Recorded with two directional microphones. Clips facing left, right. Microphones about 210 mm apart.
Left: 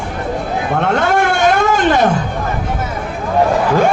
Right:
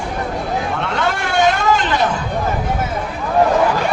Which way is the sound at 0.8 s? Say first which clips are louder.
Left 6 dB; 50° left (ahead or behind).